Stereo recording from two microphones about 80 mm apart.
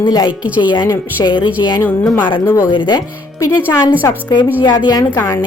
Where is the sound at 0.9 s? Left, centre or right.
Left.